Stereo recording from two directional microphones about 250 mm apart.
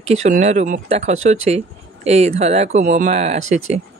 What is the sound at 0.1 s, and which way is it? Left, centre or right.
Speech, right.